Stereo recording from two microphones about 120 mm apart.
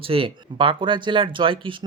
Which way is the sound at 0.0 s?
50° right (ahead or behind).